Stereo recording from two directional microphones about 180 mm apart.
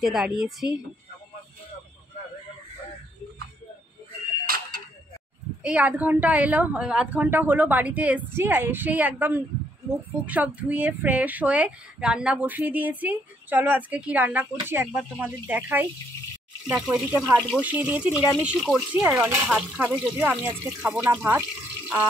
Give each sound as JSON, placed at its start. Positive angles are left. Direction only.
{"t": 0.0, "sound": "a woman's voice", "side_deg": 0}
{"t": 4.5, "sound": "a sound", "side_deg": -55}
{"t": 5.6, "sound": "speech", "side_deg": -5}